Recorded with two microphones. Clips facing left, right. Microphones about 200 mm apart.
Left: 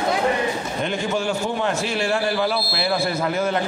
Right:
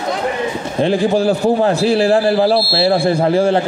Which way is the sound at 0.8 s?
35° right (ahead or behind).